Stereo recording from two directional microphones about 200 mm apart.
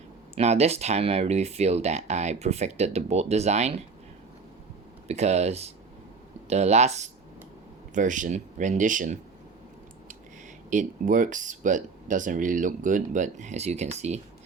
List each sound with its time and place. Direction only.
0.3 s speech: 30° right (ahead or behind)
5.0 s speech: 35° right (ahead or behind)
10.7 s speech: 40° right (ahead or behind)